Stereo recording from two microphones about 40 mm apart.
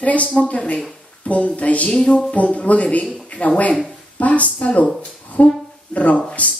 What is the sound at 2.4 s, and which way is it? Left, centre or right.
Speech, left.